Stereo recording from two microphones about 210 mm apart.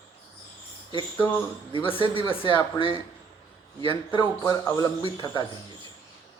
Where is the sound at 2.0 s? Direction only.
25° left (ahead or behind).